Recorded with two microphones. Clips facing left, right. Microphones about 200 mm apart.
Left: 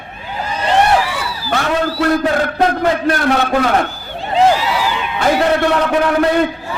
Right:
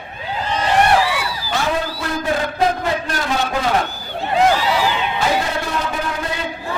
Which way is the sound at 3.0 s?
60° left (ahead or behind).